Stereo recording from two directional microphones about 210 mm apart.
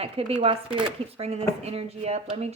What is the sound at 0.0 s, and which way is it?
Speech, 30° right (ahead or behind).